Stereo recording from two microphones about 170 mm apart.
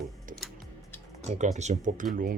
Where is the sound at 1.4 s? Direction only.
45° right (ahead or behind).